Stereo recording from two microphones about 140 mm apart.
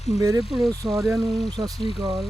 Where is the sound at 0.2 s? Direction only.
25° right (ahead or behind).